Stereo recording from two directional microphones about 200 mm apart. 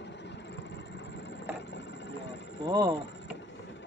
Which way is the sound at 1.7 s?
60° left (ahead or behind).